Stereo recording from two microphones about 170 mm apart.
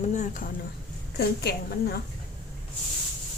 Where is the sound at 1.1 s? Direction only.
70° left (ahead or behind).